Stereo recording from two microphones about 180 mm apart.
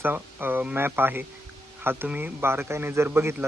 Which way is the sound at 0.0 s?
10° right (ahead or behind).